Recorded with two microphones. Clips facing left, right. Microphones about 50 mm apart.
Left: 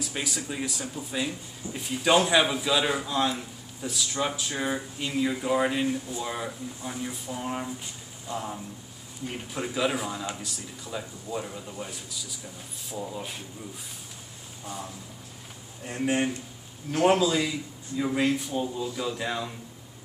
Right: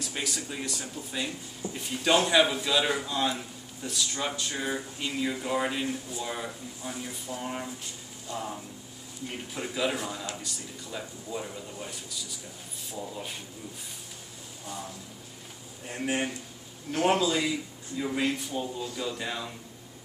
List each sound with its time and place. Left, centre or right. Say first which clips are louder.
0.0 s a man's voice: left 2 dB; centre
15.8 s a man's voice: left 4 dB; centre